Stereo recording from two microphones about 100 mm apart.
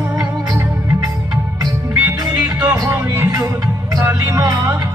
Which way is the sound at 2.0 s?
40° right (ahead or behind).